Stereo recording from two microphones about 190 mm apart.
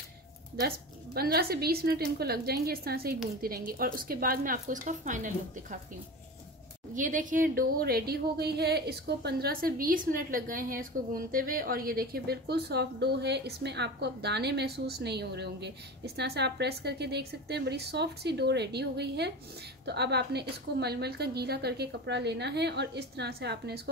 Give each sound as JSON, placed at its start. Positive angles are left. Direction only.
{"t": 0.7, "sound": "a woman's voice", "side_deg": -55}
{"t": 7.0, "sound": "a woman's voice", "side_deg": -45}